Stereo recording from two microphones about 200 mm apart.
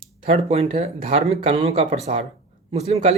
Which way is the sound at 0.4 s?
30° right (ahead or behind).